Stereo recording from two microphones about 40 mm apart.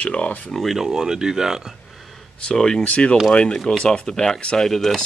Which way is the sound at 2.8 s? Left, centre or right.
Left.